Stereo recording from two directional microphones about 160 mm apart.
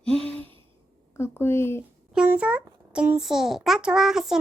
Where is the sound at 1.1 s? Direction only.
15° left (ahead or behind).